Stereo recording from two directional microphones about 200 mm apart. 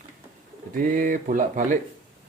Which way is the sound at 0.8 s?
40° right (ahead or behind).